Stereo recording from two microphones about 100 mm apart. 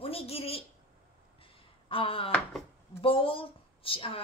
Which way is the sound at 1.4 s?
65° left (ahead or behind).